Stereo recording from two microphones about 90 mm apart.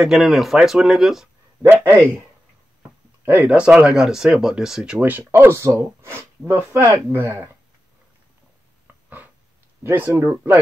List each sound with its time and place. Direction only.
0.0 s speech: centre (ahead or behind)
1.6 s speech: 25° right (ahead or behind)
3.3 s speech: 15° right (ahead or behind)
5.2 s speech: 25° right (ahead or behind)
6.8 s speech: 40° right (ahead or behind)
7.2 s speech: 25° right (ahead or behind)
9.8 s speech: 25° right (ahead or behind)